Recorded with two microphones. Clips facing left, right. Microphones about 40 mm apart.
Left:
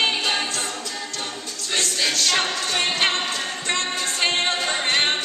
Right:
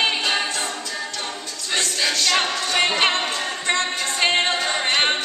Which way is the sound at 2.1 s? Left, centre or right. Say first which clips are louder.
Right 3 dB; right.